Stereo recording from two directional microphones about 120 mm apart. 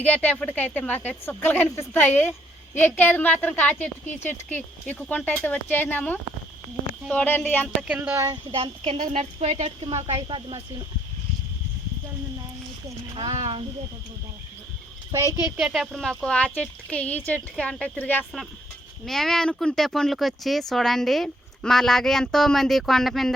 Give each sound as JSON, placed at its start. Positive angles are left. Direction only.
{"t": 0.0, "sound": "speech", "side_deg": 10}
{"t": 7.9, "sound": "speech", "side_deg": -20}
{"t": 8.5, "sound": "speech", "side_deg": -50}
{"t": 9.0, "sound": "speech", "side_deg": -75}
{"t": 10.2, "sound": "speech", "side_deg": -45}
{"t": 13.3, "sound": "speech", "side_deg": -60}
{"t": 15.1, "sound": "speech", "side_deg": -25}
{"t": 15.5, "sound": "speech", "side_deg": -5}
{"t": 19.0, "sound": "speech", "side_deg": 0}